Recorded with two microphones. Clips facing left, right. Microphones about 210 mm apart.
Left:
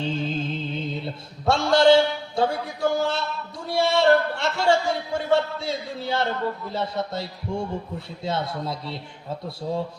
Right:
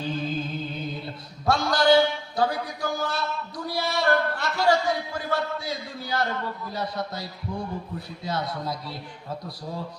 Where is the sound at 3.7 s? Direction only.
25° left (ahead or behind).